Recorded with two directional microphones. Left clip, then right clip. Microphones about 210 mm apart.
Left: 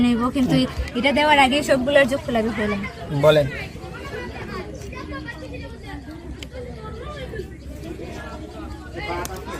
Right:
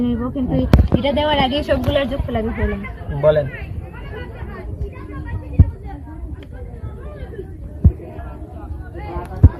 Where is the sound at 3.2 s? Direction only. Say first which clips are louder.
Right 1 dB; 30° left (ahead or behind).